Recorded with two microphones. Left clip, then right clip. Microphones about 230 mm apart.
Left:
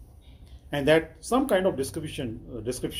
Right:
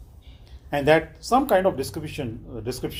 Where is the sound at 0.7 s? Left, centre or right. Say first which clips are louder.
Right 3 dB; right.